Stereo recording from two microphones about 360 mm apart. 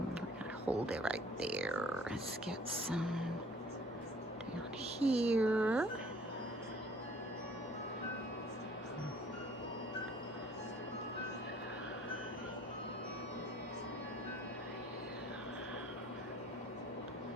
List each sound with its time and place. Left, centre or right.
0.9 s speech: centre
4.9 s speech: centre
5.3 s speech: centre